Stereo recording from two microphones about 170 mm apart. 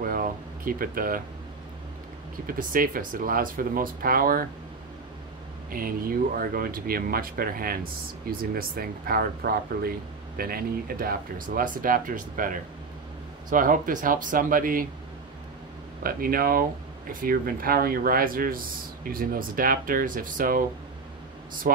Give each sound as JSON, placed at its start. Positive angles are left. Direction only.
{"t": 0.0, "sound": "air conditioning", "side_deg": -55}
{"t": 2.4, "sound": "speech", "side_deg": -55}
{"t": 5.7, "sound": "speech", "side_deg": -55}
{"t": 16.0, "sound": "speech", "side_deg": -60}
{"t": 21.7, "sound": "speech", "side_deg": -55}